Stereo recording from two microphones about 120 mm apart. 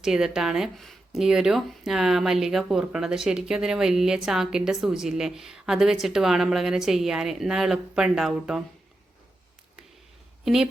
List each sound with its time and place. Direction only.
0.0 s speech: 5° right (ahead or behind)
10.4 s a woman's voice: 5° right (ahead or behind)